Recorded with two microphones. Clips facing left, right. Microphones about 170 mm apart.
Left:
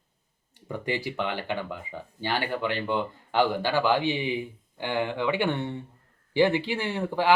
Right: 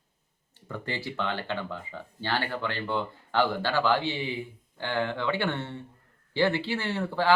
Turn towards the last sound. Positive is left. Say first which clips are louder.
# left 1 dB
turn(degrees=15)  # may be behind; listen again after turning